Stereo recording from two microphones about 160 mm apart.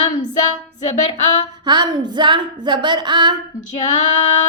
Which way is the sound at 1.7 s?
30° right (ahead or behind).